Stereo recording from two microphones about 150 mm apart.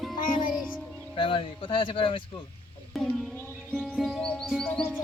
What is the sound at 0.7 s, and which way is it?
Speech, 35° left (ahead or behind).